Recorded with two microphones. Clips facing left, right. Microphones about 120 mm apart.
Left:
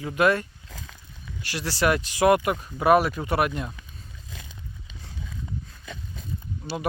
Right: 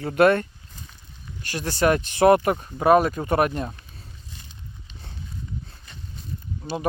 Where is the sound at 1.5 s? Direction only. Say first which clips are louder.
Right 3 dB; 50° right (ahead or behind).